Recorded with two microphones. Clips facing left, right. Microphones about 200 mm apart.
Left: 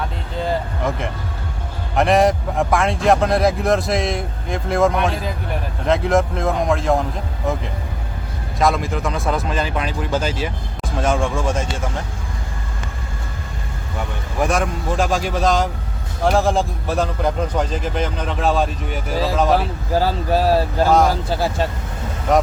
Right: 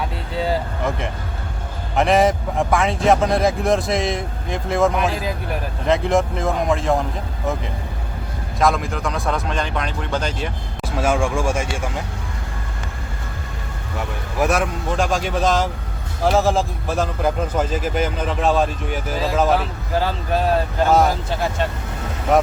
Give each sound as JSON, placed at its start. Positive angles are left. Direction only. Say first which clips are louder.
{"t": 0.9, "sound": "a man's voice", "louder": "left 1 dB", "side_deg": 0}
{"t": 8.5, "sound": "a man's voice", "louder": "left 1 dB", "side_deg": 0}
{"t": 10.9, "sound": "speech", "louder": "even", "side_deg": -10}
{"t": 14.3, "sound": "a man's voice", "louder": "even", "side_deg": -5}
{"t": 20.0, "sound": "speech", "louder": "left 3 dB", "side_deg": 35}